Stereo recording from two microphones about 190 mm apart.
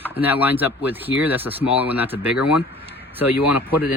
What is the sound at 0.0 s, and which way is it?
Speech, 10° right (ahead or behind).